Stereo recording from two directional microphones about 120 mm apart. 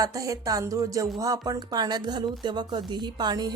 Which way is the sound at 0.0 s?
30° right (ahead or behind).